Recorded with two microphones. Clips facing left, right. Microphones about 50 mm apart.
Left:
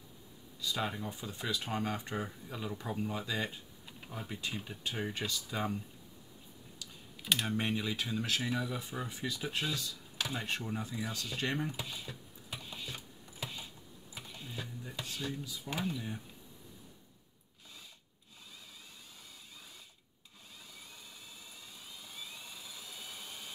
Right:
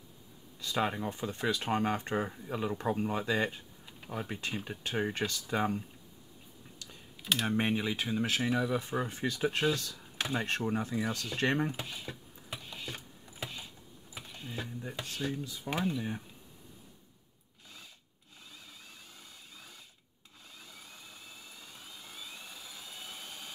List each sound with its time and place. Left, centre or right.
0.6 s speech: right
7.4 s speech: right
8.7 s speech: right
12.7 s a sound: right
14.1 s speech: right
15.6 s speech: right
22.9 s tools: right